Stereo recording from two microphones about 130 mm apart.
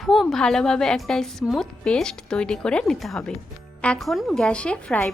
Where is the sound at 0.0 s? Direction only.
Centre (ahead or behind).